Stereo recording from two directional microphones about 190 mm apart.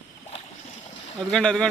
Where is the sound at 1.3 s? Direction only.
5° left (ahead or behind).